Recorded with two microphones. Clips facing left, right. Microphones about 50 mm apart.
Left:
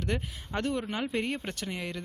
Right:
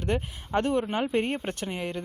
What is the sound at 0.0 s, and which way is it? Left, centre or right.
Speech, right.